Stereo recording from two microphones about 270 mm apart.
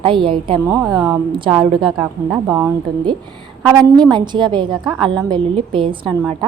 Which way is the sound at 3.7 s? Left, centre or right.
Centre.